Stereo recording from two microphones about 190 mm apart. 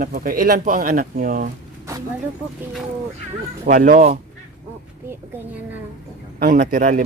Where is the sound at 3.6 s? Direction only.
45° right (ahead or behind).